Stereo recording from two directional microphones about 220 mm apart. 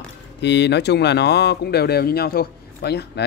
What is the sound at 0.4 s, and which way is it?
Speech, 50° left (ahead or behind).